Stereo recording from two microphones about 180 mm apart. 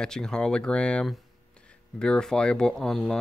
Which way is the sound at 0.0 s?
5° left (ahead or behind).